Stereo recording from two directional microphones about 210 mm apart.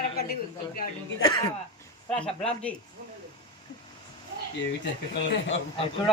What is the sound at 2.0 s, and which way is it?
Speech, 5° left (ahead or behind).